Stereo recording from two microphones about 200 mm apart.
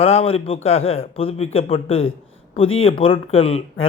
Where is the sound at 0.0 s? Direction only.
30° left (ahead or behind).